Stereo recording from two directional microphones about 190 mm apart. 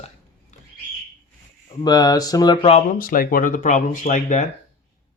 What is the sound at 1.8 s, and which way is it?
Speech, 20° left (ahead or behind).